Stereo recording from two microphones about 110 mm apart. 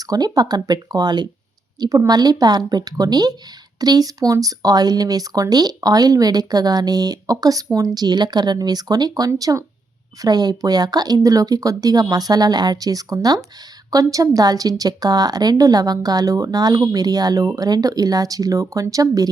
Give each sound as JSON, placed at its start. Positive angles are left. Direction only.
{"t": 0.0, "sound": "speech", "side_deg": -35}